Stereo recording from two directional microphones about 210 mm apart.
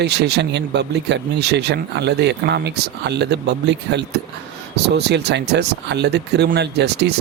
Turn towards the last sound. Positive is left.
turn(degrees=-55)  # may be behind; listen again after turning